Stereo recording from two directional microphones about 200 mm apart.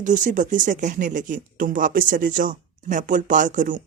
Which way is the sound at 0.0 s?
40° right (ahead or behind).